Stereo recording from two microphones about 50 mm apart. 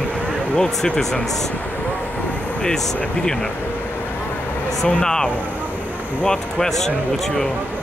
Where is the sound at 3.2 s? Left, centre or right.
Left.